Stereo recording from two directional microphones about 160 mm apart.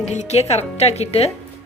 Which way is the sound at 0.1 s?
45° left (ahead or behind).